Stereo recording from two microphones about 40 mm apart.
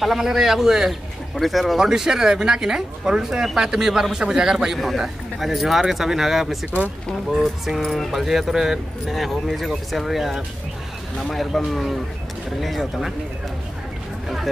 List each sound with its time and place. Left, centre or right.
0.0 s a man's voice: centre
1.8 s a man's voice: centre
4.7 s a man's voice: centre